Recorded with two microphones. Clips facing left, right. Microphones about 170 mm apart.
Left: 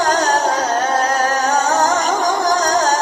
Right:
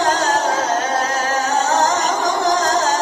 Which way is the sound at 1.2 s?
45° left (ahead or behind).